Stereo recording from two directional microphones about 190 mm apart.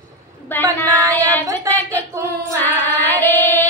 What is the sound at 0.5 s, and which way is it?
Carnatic music, 10° left (ahead or behind).